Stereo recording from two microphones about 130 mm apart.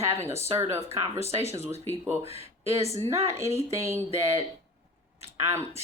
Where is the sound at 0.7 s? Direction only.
50° right (ahead or behind).